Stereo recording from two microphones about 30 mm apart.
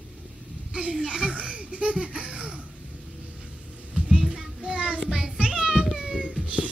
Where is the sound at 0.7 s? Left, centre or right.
Right.